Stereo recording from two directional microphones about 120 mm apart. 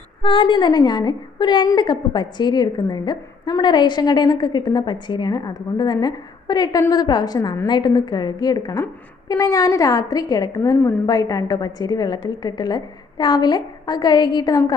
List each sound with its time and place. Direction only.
0.2 s a woman's voice: 45° left (ahead or behind)